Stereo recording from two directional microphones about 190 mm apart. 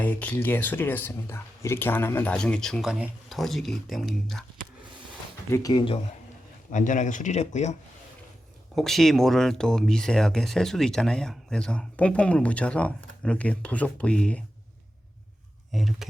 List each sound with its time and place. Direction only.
0.0 s speech: 10° left (ahead or behind)
5.5 s speech: 20° left (ahead or behind)
6.7 s speech: 40° left (ahead or behind)
8.7 s speech: centre (ahead or behind)
15.7 s speech: centre (ahead or behind)